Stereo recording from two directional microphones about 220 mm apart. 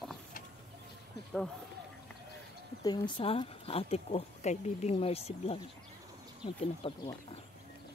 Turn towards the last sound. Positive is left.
turn(degrees=25)  # may be behind; listen again after turning